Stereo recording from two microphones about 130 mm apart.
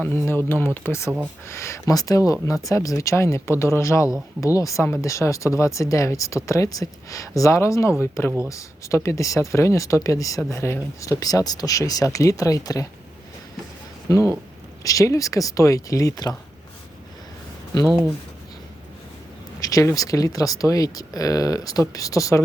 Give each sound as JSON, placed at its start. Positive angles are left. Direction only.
{"t": 0.0, "sound": "speech", "side_deg": 15}
{"t": 14.8, "sound": "speech", "side_deg": 25}
{"t": 19.5, "sound": "speech", "side_deg": 25}